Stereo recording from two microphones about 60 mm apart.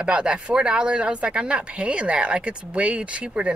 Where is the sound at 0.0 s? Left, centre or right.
Centre.